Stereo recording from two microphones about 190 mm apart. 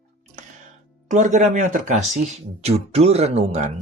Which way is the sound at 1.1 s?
40° right (ahead or behind).